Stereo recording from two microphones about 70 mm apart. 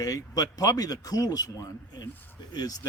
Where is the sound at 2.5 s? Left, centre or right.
Left.